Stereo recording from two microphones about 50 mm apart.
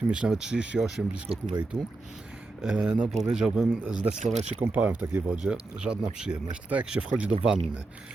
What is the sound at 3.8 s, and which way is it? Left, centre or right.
Speech, right.